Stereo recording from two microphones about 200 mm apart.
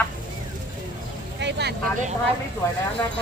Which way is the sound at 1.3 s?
60° right (ahead or behind).